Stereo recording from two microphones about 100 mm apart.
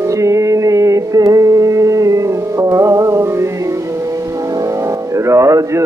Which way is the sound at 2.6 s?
30° right (ahead or behind).